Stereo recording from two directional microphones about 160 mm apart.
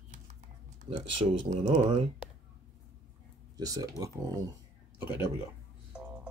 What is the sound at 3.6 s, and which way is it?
Speech, 20° right (ahead or behind).